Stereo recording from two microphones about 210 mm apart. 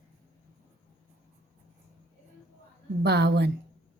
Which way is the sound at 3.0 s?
50° right (ahead or behind).